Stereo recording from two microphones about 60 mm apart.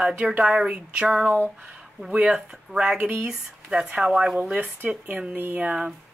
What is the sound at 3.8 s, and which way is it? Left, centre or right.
Speech, centre.